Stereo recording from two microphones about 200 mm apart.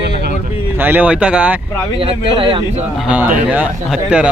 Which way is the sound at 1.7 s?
10° left (ahead or behind).